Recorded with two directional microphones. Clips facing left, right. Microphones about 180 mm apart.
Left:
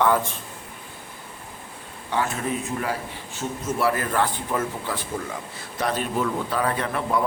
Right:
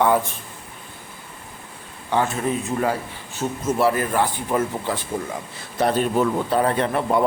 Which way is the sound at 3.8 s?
25° right (ahead or behind).